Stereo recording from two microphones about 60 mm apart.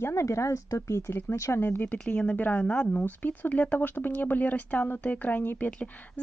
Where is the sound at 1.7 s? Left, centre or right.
Left.